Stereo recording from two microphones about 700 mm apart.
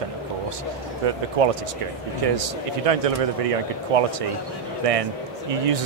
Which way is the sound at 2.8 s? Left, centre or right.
Right.